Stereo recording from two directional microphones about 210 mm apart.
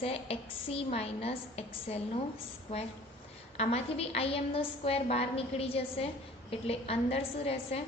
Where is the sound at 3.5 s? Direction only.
30° left (ahead or behind).